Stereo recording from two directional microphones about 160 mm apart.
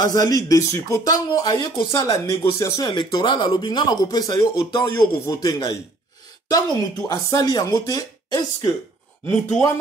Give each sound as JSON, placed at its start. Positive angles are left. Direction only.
{"t": 0.0, "sound": "speech", "side_deg": 20}
{"t": 9.3, "sound": "speech", "side_deg": 5}